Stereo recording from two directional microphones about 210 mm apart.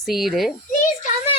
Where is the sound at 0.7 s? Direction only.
40° left (ahead or behind).